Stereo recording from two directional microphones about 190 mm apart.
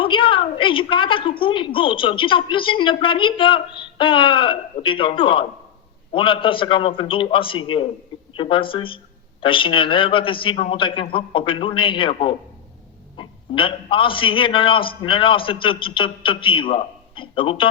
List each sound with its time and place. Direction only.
0.0 s a man's voice: 25° left (ahead or behind)